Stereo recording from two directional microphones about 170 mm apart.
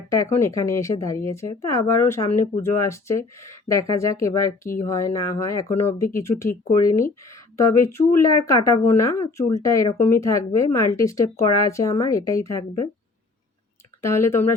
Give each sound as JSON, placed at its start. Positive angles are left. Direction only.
{"t": 0.1, "sound": "speech", "side_deg": 15}
{"t": 14.0, "sound": "speech", "side_deg": 15}